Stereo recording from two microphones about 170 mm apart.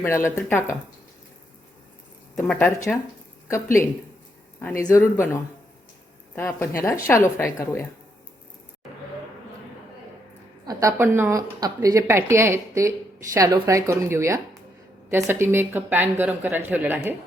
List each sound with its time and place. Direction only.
0.0 s speech: 15° left (ahead or behind)
2.4 s speech: 10° left (ahead or behind)
4.7 s speech: 50° left (ahead or behind)
4.9 s speech: 15° left (ahead or behind)
10.7 s speech: 20° right (ahead or behind)